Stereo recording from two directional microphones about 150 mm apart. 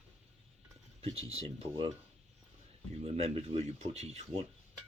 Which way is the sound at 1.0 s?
40° right (ahead or behind).